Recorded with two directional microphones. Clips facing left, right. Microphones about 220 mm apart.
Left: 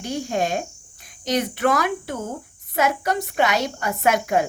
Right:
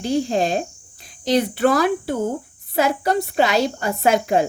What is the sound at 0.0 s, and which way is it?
A woman's voice, 30° right (ahead or behind).